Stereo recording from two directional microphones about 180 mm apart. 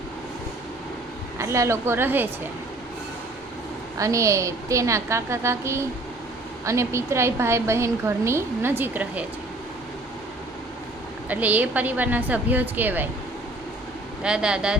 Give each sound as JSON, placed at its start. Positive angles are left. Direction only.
{"t": 1.4, "sound": "a woman's voice", "side_deg": -15}
{"t": 3.9, "sound": "a woman's voice", "side_deg": -15}
{"t": 11.3, "sound": "a woman's voice", "side_deg": -10}
{"t": 14.2, "sound": "speech", "side_deg": -5}